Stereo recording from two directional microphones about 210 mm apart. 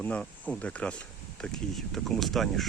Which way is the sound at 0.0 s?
5° left (ahead or behind).